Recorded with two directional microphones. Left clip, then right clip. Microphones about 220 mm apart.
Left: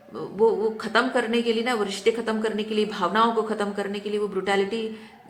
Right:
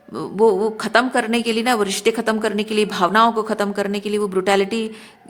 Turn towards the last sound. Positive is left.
turn(degrees=-55)  # may be behind; listen again after turning